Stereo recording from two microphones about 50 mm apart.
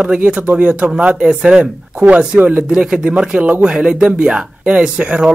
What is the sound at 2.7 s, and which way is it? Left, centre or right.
Speech, centre.